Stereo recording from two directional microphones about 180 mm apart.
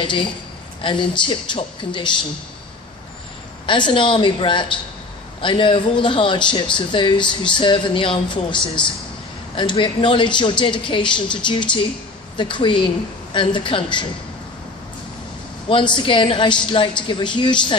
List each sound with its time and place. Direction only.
0.0 s speech: 25° left (ahead or behind)
3.6 s speech: 25° left (ahead or behind)
15.7 s speech: 25° left (ahead or behind)